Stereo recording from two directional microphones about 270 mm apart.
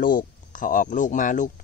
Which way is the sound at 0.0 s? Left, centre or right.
Left.